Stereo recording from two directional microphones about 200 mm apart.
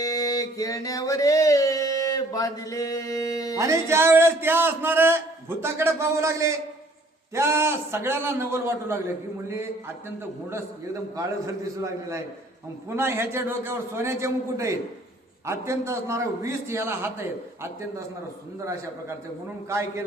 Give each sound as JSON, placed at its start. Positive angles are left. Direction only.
{"t": 0.0, "sound": "a sound", "side_deg": 20}
{"t": 3.6, "sound": "a man's voice", "side_deg": -15}
{"t": 11.8, "sound": "a man's voice", "side_deg": -15}